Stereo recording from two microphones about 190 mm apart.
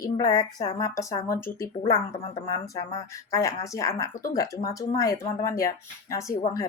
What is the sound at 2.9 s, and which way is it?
Speech, 15° left (ahead or behind).